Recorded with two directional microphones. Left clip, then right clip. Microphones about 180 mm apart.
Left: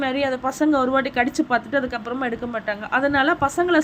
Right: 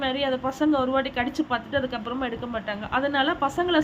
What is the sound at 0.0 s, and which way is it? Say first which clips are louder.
A woman's voice: left 3 dB; 20° left (ahead or behind).